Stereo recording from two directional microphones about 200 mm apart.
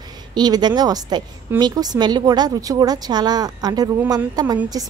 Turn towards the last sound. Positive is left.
turn(degrees=-20)  # may be behind; listen again after turning